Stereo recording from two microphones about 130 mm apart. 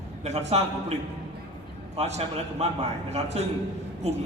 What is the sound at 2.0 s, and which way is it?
A man's voice, 55° right (ahead or behind).